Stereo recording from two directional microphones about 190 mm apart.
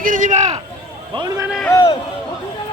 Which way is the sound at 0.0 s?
45° right (ahead or behind).